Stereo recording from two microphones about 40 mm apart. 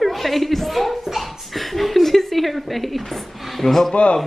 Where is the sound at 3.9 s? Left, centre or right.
Left.